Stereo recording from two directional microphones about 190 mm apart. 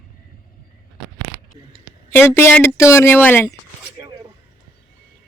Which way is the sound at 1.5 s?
35° right (ahead or behind).